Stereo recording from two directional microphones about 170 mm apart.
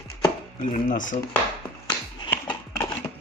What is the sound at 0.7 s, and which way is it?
Speech, 50° left (ahead or behind).